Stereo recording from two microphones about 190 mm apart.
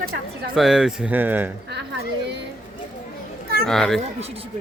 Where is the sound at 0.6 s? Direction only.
Centre (ahead or behind).